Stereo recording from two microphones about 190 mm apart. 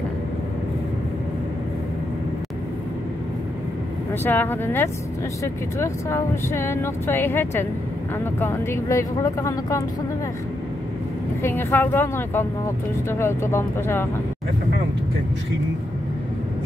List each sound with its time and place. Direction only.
4.1 s speech: 10° left (ahead or behind)
11.4 s speech: 10° left (ahead or behind)